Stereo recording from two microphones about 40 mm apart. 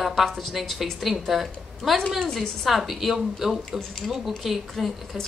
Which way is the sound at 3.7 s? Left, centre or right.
Centre.